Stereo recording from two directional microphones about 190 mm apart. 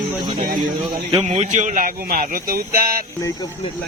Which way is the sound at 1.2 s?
35° right (ahead or behind).